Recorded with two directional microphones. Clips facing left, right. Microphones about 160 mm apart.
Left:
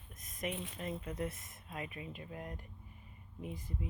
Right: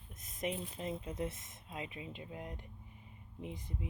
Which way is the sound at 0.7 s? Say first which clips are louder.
Right 1 dB; 20° right (ahead or behind).